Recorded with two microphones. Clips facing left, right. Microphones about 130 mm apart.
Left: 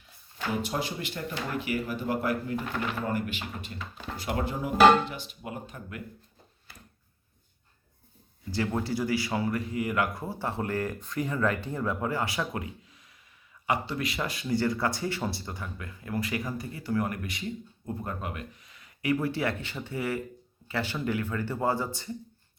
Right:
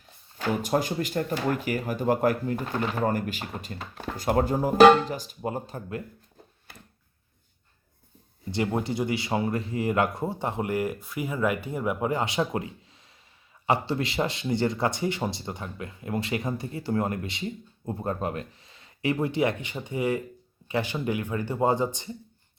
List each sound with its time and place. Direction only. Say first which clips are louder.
0.4 s speech: right 5 dB; 45° right (ahead or behind)
8.4 s speech: right 2 dB; 20° right (ahead or behind)